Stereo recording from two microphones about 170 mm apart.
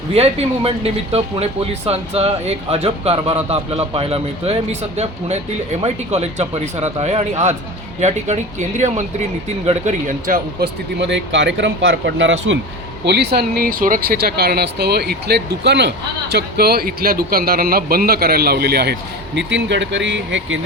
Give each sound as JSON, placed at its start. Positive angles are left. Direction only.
{"t": 0.1, "sound": "speech", "side_deg": -35}
{"t": 11.0, "sound": "speech", "side_deg": -90}
{"t": 13.1, "sound": "a man's voice", "side_deg": -75}
{"t": 16.3, "sound": "a man's voice", "side_deg": -65}